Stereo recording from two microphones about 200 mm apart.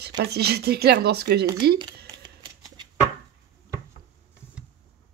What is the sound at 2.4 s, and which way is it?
Shuffling cards, 20° right (ahead or behind).